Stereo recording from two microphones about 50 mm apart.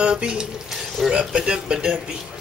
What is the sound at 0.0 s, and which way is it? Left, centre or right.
Speech, centre.